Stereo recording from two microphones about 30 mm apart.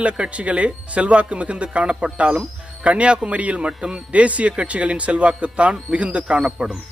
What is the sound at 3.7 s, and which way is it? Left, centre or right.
Speech, right.